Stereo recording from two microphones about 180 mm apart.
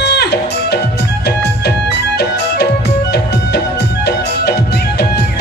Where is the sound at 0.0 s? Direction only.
65° left (ahead or behind).